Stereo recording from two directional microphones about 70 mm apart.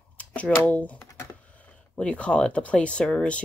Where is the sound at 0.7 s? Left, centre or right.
Centre.